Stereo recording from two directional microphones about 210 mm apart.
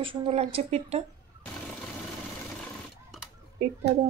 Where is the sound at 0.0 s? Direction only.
25° right (ahead or behind).